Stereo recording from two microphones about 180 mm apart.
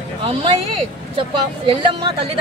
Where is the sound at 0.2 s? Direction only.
30° right (ahead or behind).